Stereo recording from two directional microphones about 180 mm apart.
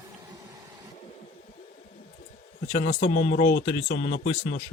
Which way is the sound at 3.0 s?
70° left (ahead or behind).